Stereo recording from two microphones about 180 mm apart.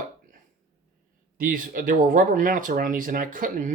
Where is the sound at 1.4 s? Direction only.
50° right (ahead or behind).